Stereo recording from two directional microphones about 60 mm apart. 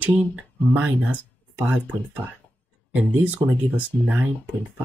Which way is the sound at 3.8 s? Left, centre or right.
Right.